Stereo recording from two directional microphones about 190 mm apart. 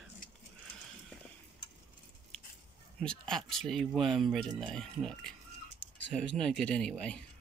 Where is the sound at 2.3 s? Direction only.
5° left (ahead or behind).